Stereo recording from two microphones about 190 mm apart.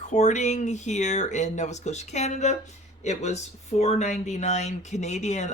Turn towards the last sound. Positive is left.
turn(degrees=40)  # may be behind; listen again after turning